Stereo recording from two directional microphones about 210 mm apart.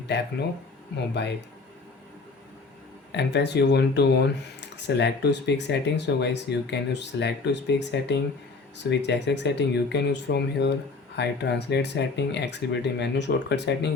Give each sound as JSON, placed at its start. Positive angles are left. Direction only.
{"t": 0.1, "sound": "speech", "side_deg": 50}
{"t": 3.1, "sound": "speech", "side_deg": 55}